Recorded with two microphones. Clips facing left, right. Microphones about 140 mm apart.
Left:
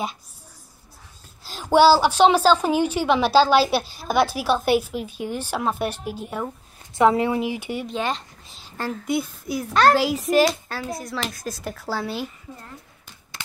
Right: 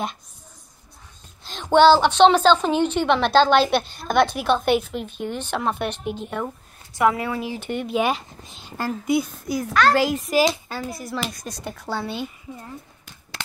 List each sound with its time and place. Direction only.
1.4 s a woman's voice: 5° left (ahead or behind)
6.9 s a woman's voice: 25° left (ahead or behind)
7.8 s speech: 10° right (ahead or behind)